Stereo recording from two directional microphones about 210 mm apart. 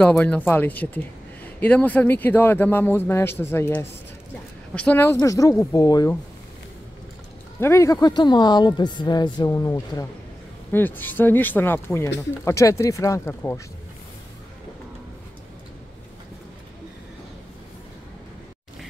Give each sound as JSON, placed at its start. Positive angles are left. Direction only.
{"t": 0.0, "sound": "speech", "side_deg": 5}
{"t": 7.6, "sound": "a woman's voice", "side_deg": 15}